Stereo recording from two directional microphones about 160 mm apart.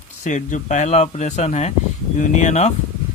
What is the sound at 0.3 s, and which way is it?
Speech, 50° left (ahead or behind).